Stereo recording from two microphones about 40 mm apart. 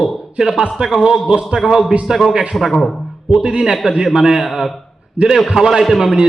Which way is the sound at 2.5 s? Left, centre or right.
Centre.